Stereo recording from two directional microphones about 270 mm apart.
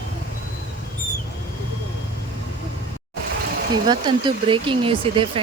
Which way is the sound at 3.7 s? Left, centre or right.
Centre.